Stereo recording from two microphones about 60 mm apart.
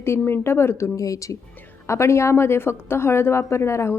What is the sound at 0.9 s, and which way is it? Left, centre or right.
Speech, left.